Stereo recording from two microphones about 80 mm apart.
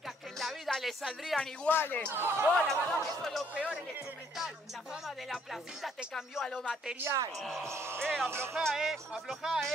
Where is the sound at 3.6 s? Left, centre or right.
Centre.